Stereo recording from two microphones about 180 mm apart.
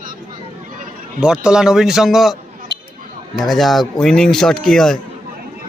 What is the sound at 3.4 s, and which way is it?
Speech, centre (ahead or behind).